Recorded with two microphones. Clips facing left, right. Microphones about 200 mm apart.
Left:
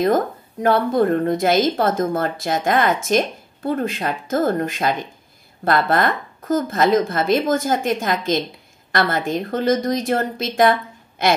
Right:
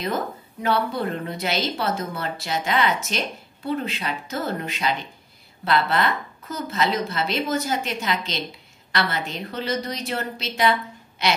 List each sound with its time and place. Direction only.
0.0 s a woman's voice: 50° left (ahead or behind)